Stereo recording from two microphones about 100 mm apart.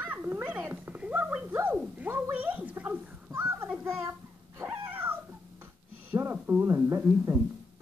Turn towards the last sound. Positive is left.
turn(degrees=-25)  # may be behind; listen again after turning